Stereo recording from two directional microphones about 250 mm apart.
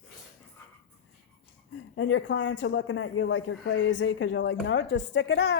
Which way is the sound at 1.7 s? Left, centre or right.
Left.